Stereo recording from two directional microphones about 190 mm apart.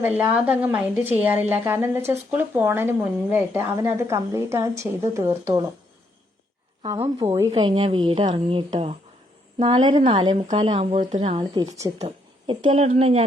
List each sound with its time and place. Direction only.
0.2 s speech: 5° right (ahead or behind)
6.8 s speech: 20° right (ahead or behind)
7.5 s speech: 25° right (ahead or behind)